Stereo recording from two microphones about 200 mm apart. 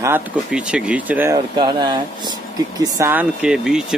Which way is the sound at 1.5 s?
20° right (ahead or behind).